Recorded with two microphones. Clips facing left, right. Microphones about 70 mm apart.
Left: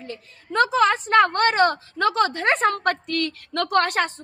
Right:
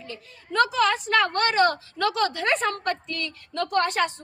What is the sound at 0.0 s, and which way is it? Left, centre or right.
A woman's voice, left.